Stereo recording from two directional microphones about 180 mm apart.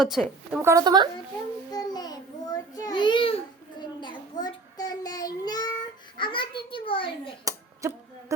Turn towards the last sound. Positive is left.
turn(degrees=-15)  # may be behind; listen again after turning